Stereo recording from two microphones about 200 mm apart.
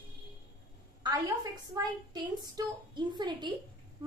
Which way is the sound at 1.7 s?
20° right (ahead or behind).